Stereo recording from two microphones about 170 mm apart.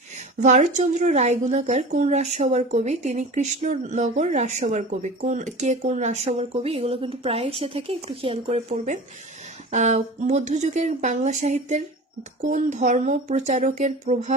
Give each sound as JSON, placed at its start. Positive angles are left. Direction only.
{"t": 0.3, "sound": "speech", "side_deg": -45}